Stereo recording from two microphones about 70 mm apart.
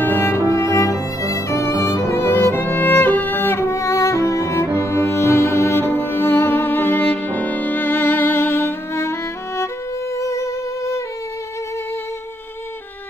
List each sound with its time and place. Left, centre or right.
0.0 s music: left
0.5 s music: left
10.1 s music: left